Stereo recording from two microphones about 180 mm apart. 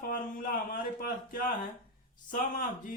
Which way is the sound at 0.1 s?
50° left (ahead or behind).